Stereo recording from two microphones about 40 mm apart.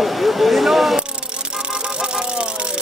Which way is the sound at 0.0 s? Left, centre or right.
Centre.